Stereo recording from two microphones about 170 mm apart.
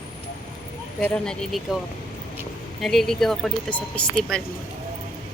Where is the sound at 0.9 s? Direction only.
5° left (ahead or behind).